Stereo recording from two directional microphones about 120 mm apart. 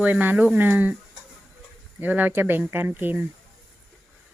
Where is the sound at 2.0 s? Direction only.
15° right (ahead or behind).